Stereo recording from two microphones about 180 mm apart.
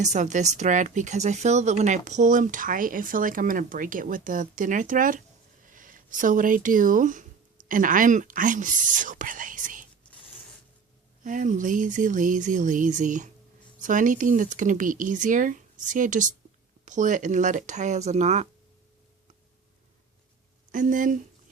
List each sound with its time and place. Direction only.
0.0 s speech: 40° right (ahead or behind)
11.2 s speech: 45° right (ahead or behind)
20.7 s speech: 45° right (ahead or behind)